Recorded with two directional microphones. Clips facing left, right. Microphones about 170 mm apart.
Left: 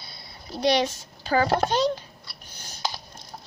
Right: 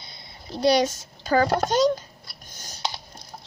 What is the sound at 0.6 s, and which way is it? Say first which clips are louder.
A woman's voice: right 3 dB; 40° right (ahead or behind).